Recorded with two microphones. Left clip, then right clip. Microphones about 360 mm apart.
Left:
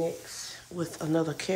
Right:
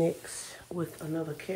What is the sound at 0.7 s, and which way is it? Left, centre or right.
Speech, centre.